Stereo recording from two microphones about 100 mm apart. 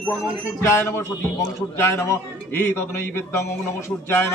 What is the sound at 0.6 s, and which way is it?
A man's voice, 25° left (ahead or behind).